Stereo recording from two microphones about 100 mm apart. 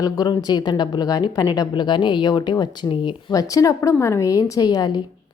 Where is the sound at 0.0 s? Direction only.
40° left (ahead or behind).